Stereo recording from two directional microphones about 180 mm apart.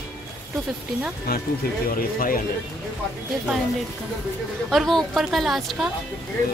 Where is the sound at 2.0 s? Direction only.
50° left (ahead or behind).